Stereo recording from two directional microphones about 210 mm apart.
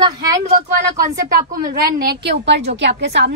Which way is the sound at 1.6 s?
45° right (ahead or behind).